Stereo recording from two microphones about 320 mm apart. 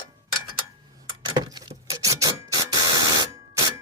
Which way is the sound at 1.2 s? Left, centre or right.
Centre.